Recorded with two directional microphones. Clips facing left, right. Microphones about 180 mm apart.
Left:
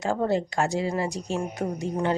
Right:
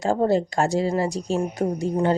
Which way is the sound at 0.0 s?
35° right (ahead or behind).